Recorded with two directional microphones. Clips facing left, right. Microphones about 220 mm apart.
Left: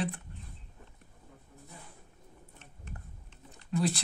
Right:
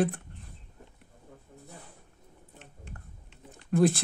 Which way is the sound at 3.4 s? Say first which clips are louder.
Right 7 dB; 50° right (ahead or behind).